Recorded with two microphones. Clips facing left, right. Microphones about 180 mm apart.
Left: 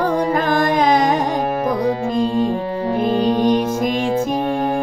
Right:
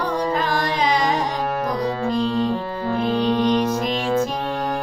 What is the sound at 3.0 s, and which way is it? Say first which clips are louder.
Music: left 3 dB; 45° left (ahead or behind).